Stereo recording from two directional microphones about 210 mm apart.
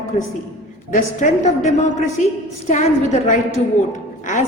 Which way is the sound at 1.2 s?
40° left (ahead or behind).